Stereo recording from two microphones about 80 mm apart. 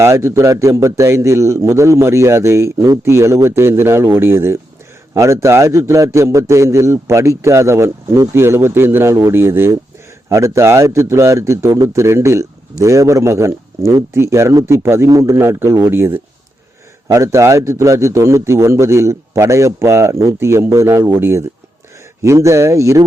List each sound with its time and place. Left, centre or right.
0.0 s a man's voice: right